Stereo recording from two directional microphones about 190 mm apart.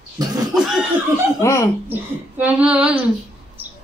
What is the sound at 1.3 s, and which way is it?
Speech, 15° left (ahead or behind).